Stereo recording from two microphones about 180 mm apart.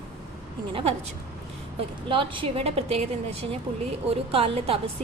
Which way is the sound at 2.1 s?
30° right (ahead or behind).